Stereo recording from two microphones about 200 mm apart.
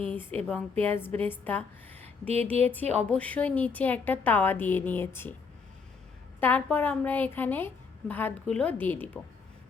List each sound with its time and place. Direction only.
0.1 s a woman's voice: 10° left (ahead or behind)
2.0 s a sound: 30° right (ahead or behind)
3.1 s a woman's voice: 5° left (ahead or behind)
6.4 s a woman's voice: 10° left (ahead or behind)